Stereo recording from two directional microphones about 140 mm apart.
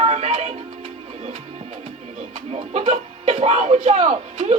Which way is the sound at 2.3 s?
45° right (ahead or behind).